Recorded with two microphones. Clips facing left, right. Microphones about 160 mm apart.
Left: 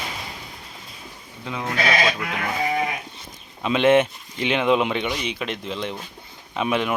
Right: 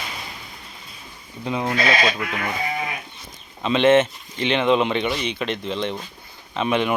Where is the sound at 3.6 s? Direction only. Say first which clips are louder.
Right 1 dB; 10° left (ahead or behind).